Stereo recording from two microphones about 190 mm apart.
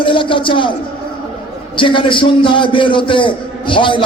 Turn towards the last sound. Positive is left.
turn(degrees=25)  # may be behind; listen again after turning